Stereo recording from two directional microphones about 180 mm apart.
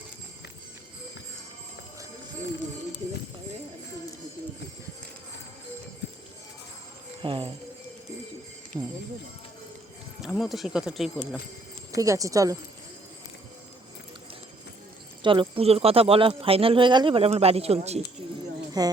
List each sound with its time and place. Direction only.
7.2 s speech: 30° right (ahead or behind)
8.7 s music: 15° right (ahead or behind)
10.2 s speech: centre (ahead or behind)
11.9 s speech: 20° right (ahead or behind)
15.2 s speech: 30° right (ahead or behind)
18.8 s speech: 20° right (ahead or behind)